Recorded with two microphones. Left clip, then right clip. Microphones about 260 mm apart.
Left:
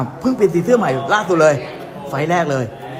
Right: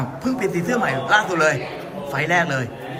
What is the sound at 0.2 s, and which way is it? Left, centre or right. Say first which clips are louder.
A man's voice: left 8 dB; left.